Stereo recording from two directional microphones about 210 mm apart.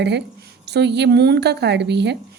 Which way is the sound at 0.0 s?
55° right (ahead or behind).